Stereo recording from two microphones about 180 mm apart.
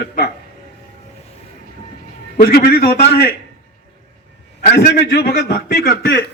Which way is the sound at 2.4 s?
60° left (ahead or behind).